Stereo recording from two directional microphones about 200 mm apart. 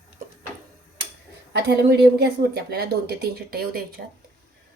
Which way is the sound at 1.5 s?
55° right (ahead or behind).